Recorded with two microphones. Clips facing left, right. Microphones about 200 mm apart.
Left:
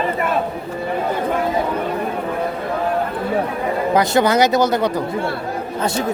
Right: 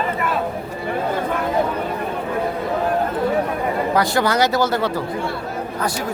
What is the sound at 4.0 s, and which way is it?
Speech, 20° left (ahead or behind).